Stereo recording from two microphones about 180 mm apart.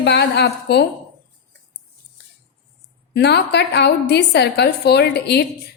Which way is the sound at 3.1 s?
70° left (ahead or behind).